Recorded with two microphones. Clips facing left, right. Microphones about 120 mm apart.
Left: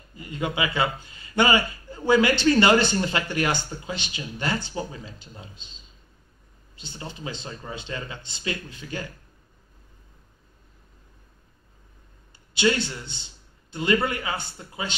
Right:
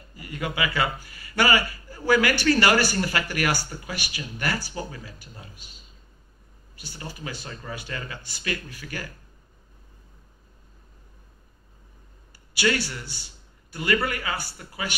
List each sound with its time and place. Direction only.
0.1 s a man's voice: 25° left (ahead or behind)
12.5 s a man's voice: 20° left (ahead or behind)